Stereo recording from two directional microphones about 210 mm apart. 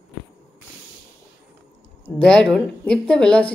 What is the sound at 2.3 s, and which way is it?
Speech, 5° left (ahead or behind).